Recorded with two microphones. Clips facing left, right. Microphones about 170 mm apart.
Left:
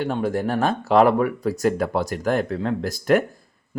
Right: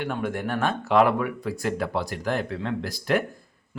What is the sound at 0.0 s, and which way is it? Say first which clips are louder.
Speech: left 5 dB; 35° left (ahead or behind).